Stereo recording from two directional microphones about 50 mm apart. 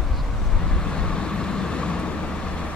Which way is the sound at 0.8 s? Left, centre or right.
Centre.